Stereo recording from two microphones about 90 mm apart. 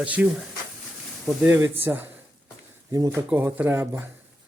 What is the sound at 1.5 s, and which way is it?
Speech, 25° right (ahead or behind).